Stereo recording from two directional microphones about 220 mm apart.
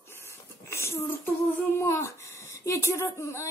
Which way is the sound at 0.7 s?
10° left (ahead or behind).